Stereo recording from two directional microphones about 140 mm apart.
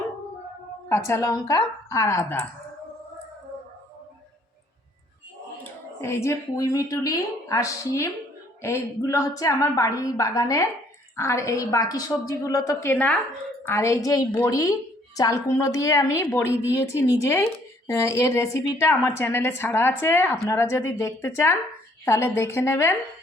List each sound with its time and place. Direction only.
0.9 s a woman's voice: 20° left (ahead or behind)
6.0 s a woman's voice: 20° left (ahead or behind)